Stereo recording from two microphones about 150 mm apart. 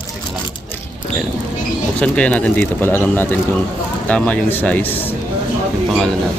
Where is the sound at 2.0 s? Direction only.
10° left (ahead or behind).